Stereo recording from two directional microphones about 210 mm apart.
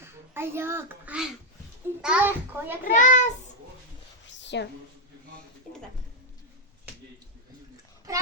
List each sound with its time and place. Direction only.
0.0 s a child's voice: 10° right (ahead or behind)
2.8 s a child's voice: 35° left (ahead or behind)
4.3 s a sound: 55° left (ahead or behind)